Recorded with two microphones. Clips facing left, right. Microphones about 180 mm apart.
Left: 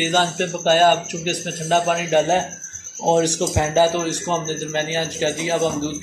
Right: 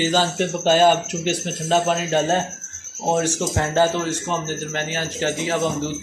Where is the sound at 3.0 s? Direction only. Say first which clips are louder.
Left 3 dB; 20° left (ahead or behind).